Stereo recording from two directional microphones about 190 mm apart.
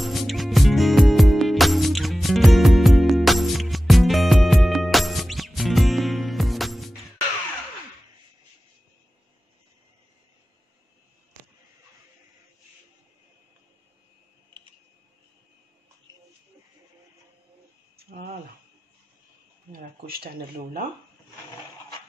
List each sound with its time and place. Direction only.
0.0 s music: centre (ahead or behind)
18.1 s a sound: 45° right (ahead or behind)
19.7 s speech: 50° right (ahead or behind)